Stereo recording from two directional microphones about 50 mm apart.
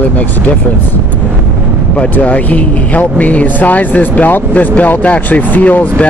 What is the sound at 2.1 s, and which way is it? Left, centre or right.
Speech, left.